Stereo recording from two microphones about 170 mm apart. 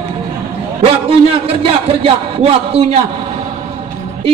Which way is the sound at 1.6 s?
30° right (ahead or behind).